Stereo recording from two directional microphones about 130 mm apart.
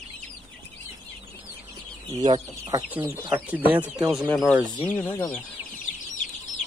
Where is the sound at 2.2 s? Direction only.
35° right (ahead or behind).